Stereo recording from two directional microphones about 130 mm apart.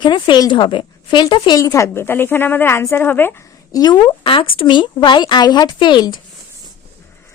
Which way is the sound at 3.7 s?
30° left (ahead or behind).